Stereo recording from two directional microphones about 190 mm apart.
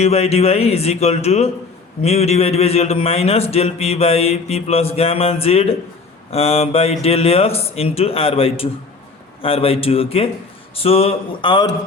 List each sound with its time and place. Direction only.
0.0 s a man's voice: 35° left (ahead or behind)